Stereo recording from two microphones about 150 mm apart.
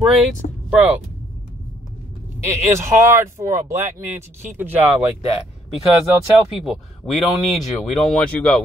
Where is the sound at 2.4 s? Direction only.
20° right (ahead or behind).